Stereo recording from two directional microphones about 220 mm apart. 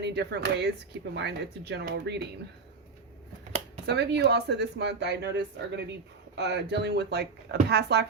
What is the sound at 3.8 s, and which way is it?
Speech, 50° right (ahead or behind).